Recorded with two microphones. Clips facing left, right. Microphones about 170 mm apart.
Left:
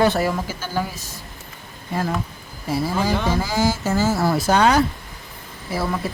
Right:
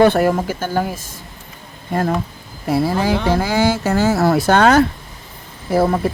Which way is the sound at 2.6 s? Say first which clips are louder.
Right 5 dB; 60° right (ahead or behind).